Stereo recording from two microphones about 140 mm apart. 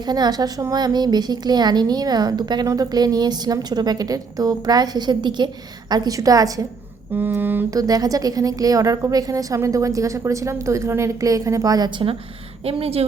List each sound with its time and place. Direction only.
0.0 s a woman's voice: 30° right (ahead or behind)
7.1 s a sound: 15° right (ahead or behind)
7.8 s a woman's voice: 25° right (ahead or behind)
12.6 s a woman's voice: 45° right (ahead or behind)